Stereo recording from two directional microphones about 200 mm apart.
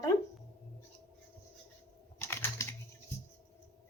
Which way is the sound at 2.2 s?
10° left (ahead or behind).